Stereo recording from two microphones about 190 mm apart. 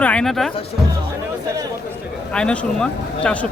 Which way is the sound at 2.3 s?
5° left (ahead or behind).